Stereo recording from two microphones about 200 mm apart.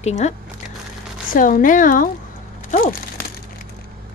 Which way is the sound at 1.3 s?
40° left (ahead or behind).